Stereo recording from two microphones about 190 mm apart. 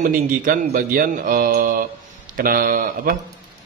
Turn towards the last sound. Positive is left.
turn(degrees=-50)  # may be behind; listen again after turning